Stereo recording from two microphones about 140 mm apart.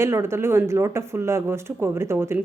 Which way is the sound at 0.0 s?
20° right (ahead or behind).